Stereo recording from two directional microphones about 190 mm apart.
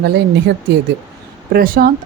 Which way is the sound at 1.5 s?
50° right (ahead or behind).